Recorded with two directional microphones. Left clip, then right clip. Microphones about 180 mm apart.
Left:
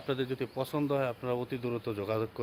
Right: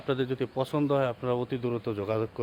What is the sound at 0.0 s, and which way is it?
A man's voice, 35° right (ahead or behind).